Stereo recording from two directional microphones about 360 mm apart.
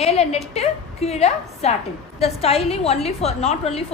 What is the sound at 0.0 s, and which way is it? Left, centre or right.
A woman's voice, centre.